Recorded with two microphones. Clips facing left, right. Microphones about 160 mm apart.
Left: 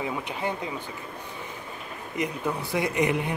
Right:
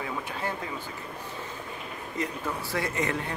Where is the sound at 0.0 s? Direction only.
15° left (ahead or behind).